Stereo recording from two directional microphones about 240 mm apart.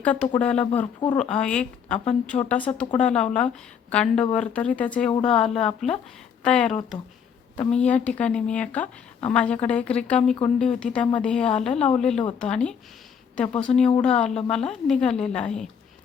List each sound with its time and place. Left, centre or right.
0.0 s a woman's voice: centre
5.1 s a woman's voice: left
5.4 s a woman's voice: centre